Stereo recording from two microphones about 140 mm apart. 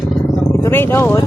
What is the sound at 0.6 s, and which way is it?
Speech, 15° left (ahead or behind).